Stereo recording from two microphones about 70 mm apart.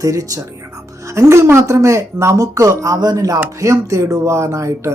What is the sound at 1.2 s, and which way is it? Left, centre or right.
Speech, right.